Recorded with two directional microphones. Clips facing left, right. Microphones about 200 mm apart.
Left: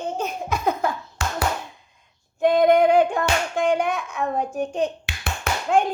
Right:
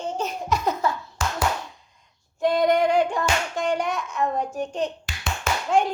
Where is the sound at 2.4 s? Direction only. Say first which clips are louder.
Left 4 dB; 55° left (ahead or behind).